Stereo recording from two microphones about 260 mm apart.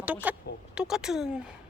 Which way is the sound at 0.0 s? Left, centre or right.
Centre.